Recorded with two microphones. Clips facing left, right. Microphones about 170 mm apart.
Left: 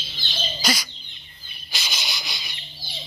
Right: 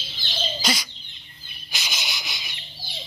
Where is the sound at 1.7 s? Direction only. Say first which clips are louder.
Even; 15° right (ahead or behind).